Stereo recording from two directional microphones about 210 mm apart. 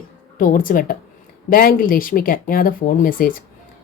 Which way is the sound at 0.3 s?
40° left (ahead or behind).